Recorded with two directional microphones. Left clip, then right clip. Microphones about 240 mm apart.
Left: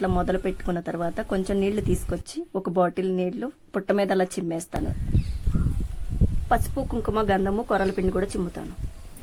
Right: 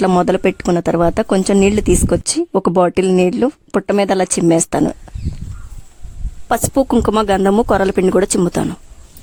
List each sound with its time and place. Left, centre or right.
0.0 s speech: right
6.5 s speech: right